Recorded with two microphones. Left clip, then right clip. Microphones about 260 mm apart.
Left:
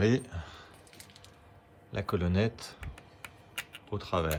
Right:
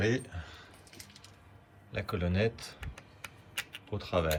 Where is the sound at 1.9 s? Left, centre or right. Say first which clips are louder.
Left 2 dB; centre.